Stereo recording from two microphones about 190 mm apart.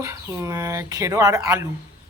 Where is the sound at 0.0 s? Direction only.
15° right (ahead or behind).